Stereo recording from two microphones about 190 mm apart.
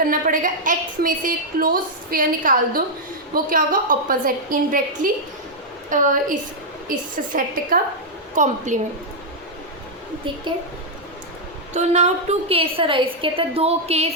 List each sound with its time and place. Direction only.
0.0 s a woman's voice: 45° right (ahead or behind)
11.7 s a woman's voice: 35° right (ahead or behind)